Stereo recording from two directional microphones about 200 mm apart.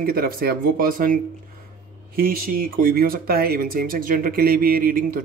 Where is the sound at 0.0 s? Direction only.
50° right (ahead or behind).